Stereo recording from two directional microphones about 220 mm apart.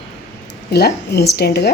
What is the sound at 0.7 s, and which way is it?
A woman's voice, 45° left (ahead or behind).